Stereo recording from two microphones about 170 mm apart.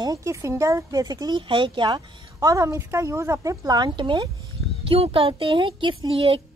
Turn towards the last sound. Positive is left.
turn(degrees=-30)  # may be behind; listen again after turning